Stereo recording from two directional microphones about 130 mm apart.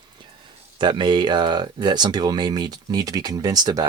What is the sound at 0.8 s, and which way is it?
Speech, 35° right (ahead or behind).